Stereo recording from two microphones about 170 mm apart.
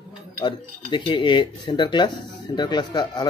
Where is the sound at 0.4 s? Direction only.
30° left (ahead or behind).